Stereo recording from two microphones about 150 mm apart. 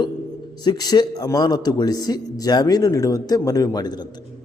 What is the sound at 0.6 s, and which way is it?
A man's voice, 25° left (ahead or behind).